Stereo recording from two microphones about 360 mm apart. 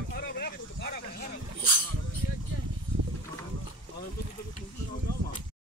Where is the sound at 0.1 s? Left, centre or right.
Left.